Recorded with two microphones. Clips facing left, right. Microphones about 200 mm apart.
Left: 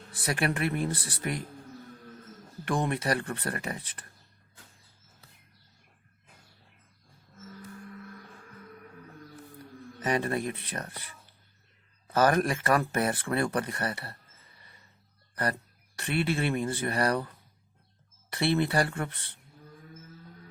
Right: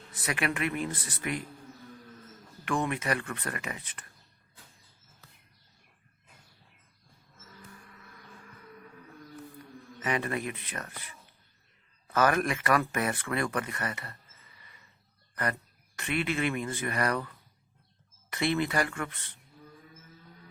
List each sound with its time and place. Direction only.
0.1 s speech: 35° left (ahead or behind)
2.6 s speech: 35° left (ahead or behind)
10.0 s speech: 35° left (ahead or behind)
12.1 s speech: 35° left (ahead or behind)
16.0 s speech: 35° left (ahead or behind)
18.3 s speech: 30° left (ahead or behind)